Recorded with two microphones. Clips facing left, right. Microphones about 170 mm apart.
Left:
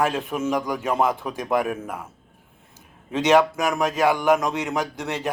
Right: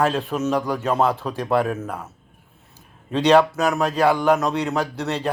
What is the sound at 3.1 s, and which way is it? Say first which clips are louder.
A man's voice: right 2 dB; 15° left (ahead or behind).